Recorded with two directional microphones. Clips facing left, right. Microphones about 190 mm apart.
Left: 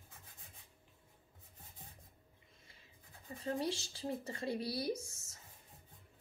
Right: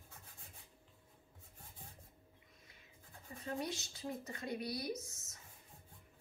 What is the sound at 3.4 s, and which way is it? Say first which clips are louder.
Speech: left 4 dB; 30° left (ahead or behind).